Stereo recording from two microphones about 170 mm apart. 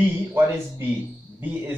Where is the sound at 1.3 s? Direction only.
10° right (ahead or behind).